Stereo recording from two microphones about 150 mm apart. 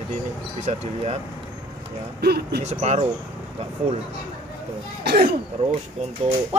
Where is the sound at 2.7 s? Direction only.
45° right (ahead or behind).